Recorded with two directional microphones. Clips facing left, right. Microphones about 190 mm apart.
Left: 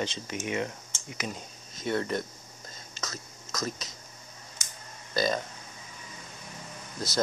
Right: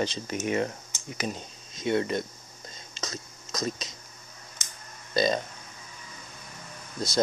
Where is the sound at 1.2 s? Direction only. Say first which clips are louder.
Right 4 dB; 25° right (ahead or behind).